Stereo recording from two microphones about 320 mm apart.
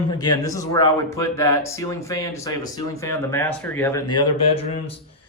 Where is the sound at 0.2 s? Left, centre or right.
Centre.